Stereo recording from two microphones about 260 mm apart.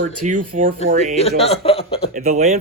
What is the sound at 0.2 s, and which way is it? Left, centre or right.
Speech, right.